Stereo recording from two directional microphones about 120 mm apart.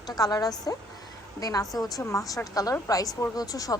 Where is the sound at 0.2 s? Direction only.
30° left (ahead or behind).